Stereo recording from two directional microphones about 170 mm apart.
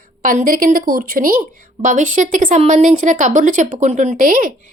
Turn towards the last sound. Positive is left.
turn(degrees=-55)  # may be behind; listen again after turning